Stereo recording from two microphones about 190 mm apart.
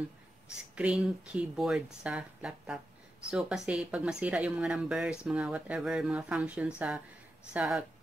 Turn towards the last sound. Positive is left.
turn(degrees=-5)  # may be behind; listen again after turning